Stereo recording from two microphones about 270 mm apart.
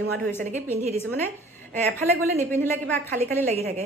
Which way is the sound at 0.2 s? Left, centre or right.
Centre.